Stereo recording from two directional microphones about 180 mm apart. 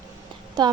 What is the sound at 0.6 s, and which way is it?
Speech, 25° right (ahead or behind).